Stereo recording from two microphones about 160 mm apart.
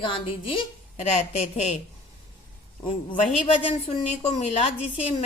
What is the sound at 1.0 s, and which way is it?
Speech, 45° left (ahead or behind).